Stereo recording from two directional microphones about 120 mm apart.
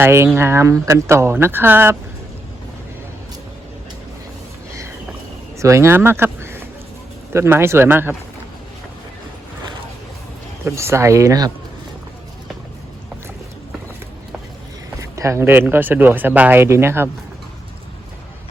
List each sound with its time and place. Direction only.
0.0 s speech: 20° right (ahead or behind)
5.5 s speech: 25° right (ahead or behind)
10.7 s speech: 20° right (ahead or behind)
15.1 s speech: 25° right (ahead or behind)